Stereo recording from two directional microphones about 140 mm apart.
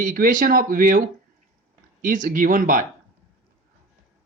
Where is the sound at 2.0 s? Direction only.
70° right (ahead or behind).